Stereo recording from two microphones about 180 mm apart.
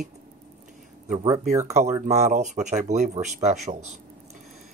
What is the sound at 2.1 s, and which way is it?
Speech, 40° right (ahead or behind).